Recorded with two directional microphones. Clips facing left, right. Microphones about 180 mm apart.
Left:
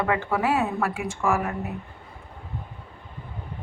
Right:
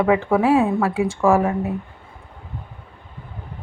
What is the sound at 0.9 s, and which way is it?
Speech, 35° right (ahead or behind).